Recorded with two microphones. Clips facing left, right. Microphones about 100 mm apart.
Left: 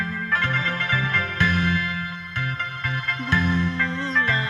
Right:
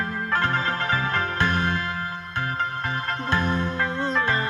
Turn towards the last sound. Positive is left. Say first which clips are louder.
# right 1 dB
turn(degrees=-30)  # may be behind; listen again after turning